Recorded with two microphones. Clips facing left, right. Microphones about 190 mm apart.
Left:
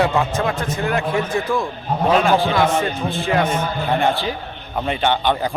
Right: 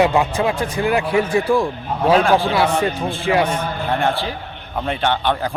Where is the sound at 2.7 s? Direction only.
35° right (ahead or behind).